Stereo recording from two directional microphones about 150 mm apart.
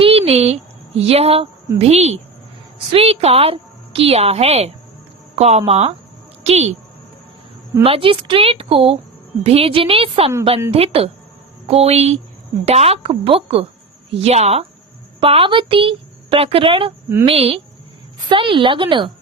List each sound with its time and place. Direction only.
0.0 s a sound: 40° right (ahead or behind)
1.0 s a woman's voice: 45° right (ahead or behind)
7.9 s a woman's voice: 40° right (ahead or behind)